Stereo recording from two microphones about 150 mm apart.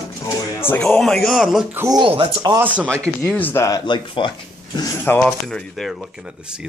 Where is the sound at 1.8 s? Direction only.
25° right (ahead or behind).